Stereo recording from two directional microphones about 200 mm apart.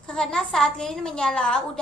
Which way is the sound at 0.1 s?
5° left (ahead or behind).